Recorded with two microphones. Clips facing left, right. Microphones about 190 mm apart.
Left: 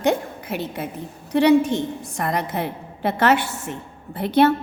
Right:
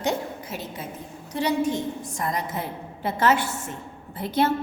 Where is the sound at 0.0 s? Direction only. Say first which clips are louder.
Left 5 dB; 60° left (ahead or behind).